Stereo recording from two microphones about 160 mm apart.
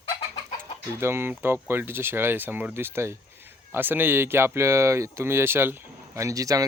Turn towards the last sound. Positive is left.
turn(degrees=-20)  # may be behind; listen again after turning